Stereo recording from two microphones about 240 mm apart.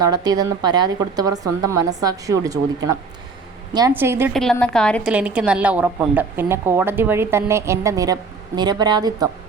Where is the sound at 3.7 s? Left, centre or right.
Centre.